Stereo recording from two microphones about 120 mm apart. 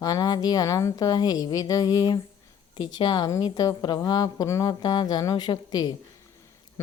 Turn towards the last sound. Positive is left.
turn(degrees=35)  # may be behind; listen again after turning